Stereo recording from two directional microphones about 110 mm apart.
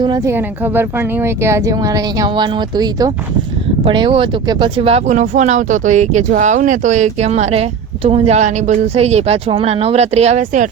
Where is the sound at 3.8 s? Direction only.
50° right (ahead or behind).